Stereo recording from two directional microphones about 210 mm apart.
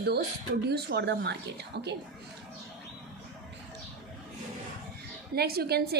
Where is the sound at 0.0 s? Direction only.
50° right (ahead or behind).